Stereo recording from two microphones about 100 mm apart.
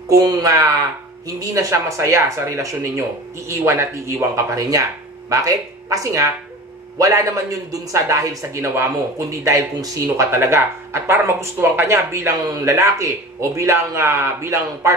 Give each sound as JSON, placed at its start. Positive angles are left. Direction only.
{"t": 0.1, "sound": "a man's voice", "side_deg": -35}